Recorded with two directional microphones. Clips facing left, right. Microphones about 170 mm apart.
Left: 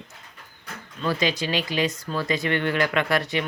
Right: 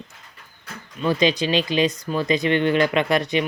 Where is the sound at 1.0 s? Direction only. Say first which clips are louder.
Right 5 dB; 20° right (ahead or behind).